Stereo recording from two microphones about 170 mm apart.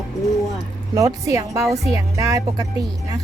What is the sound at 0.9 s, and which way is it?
Speech, 20° right (ahead or behind).